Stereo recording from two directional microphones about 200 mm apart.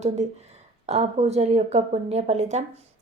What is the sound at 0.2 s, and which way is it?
A woman's voice, 35° right (ahead or behind).